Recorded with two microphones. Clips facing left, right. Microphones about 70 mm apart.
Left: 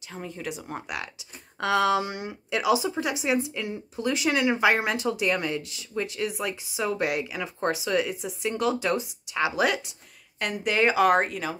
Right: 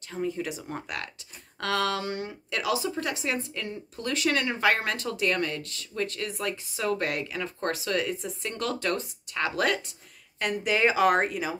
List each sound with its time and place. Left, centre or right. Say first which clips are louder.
0.1 s a woman's voice: right 4 dB; centre